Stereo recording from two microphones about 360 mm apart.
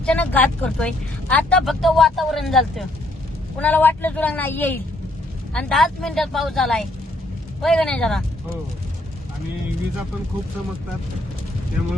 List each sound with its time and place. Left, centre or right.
0.0 s speech: centre